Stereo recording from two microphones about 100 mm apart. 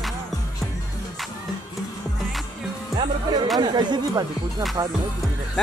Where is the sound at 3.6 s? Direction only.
45° right (ahead or behind).